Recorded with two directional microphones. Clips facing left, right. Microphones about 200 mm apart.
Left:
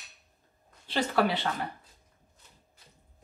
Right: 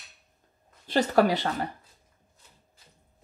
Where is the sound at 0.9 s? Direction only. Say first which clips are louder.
Right 5 dB; 45° right (ahead or behind).